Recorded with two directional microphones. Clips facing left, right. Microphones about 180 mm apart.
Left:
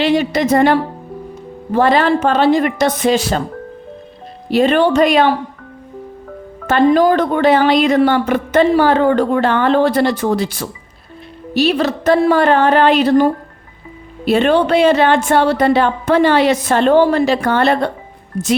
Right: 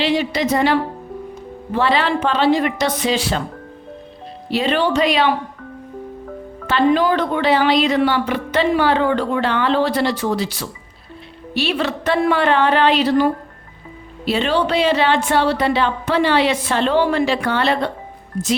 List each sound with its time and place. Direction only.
0.0 s speech: 50° left (ahead or behind)
4.4 s speech: 50° left (ahead or behind)
6.7 s speech: 45° left (ahead or behind)
11.5 s a woman's voice: 40° left (ahead or behind)